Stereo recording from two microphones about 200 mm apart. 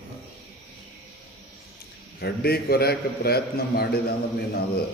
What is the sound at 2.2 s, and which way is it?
A man's voice, 50° left (ahead or behind).